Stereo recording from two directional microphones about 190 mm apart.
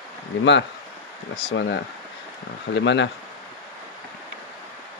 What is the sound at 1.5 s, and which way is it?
Speech, 65° left (ahead or behind).